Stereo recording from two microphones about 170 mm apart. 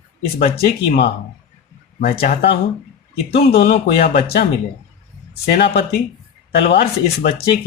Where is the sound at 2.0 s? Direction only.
60° left (ahead or behind).